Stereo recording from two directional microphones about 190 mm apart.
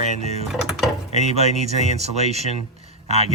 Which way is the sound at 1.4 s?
35° right (ahead or behind).